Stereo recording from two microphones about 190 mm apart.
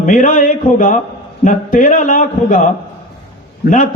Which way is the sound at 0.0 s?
45° left (ahead or behind).